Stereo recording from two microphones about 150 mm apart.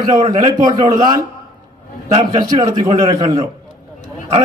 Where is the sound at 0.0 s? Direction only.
30° right (ahead or behind).